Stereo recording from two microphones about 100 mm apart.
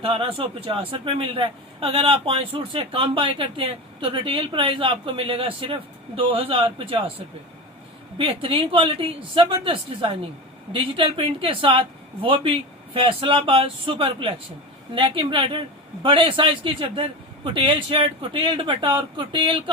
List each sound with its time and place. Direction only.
0.0 s a man's voice: 70° right (ahead or behind)
8.2 s a man's voice: 65° right (ahead or behind)